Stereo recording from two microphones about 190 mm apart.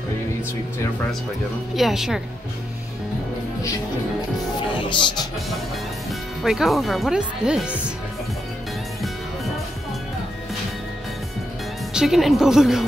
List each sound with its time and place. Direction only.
1.8 s speech: centre (ahead or behind)
4.8 s speech: 25° left (ahead or behind)
6.0 s speech: centre (ahead or behind)
11.9 s speech: centre (ahead or behind)